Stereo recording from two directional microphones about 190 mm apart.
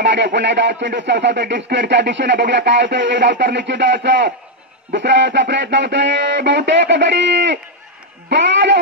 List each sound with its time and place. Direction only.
0.0 s speech: 70° right (ahead or behind)